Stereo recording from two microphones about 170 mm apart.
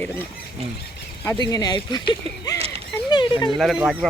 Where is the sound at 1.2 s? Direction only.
25° left (ahead or behind).